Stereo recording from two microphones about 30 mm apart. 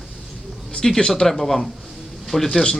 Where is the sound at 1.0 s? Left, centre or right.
Centre.